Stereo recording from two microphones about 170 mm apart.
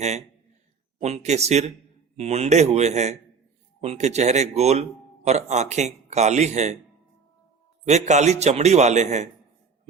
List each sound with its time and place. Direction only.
1.0 s a man's voice: 40° right (ahead or behind)
7.9 s a man's voice: 40° right (ahead or behind)